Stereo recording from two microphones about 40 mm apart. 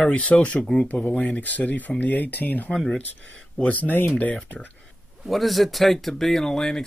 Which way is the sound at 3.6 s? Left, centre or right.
Left.